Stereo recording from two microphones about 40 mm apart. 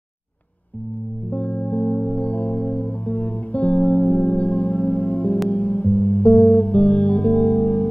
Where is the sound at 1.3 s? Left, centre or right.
Left.